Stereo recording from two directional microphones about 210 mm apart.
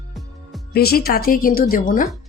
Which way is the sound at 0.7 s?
45° left (ahead or behind).